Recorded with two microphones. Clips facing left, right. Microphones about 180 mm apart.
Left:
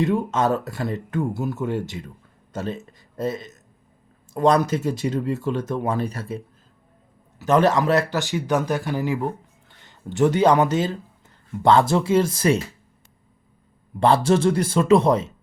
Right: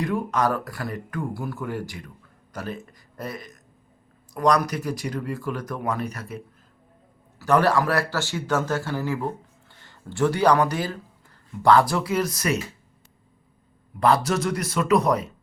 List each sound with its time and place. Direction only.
0.0 s speech: 25° left (ahead or behind)
14.0 s speech: 30° left (ahead or behind)